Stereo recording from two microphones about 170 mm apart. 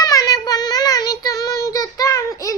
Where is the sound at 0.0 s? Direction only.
20° left (ahead or behind).